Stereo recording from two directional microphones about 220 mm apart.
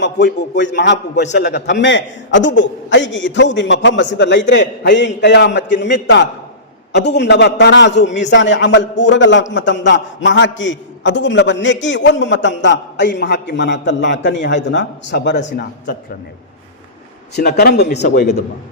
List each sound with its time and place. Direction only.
0.0 s a man's voice: 50° left (ahead or behind)
15.4 s speech: 40° left (ahead or behind)
17.3 s a man's voice: 45° left (ahead or behind)